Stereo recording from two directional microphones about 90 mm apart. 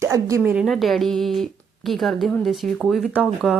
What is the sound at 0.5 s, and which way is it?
Speech, centre (ahead or behind).